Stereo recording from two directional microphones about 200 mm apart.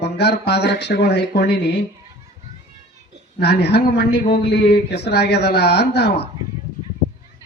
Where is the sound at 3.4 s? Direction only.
55° left (ahead or behind).